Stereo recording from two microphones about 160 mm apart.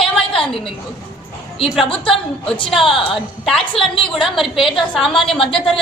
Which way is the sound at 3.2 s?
Centre (ahead or behind).